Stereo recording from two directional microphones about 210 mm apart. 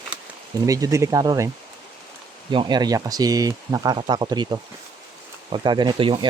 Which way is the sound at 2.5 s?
20° right (ahead or behind).